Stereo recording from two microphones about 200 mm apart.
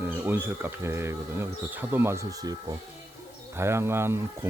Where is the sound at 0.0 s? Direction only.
10° right (ahead or behind).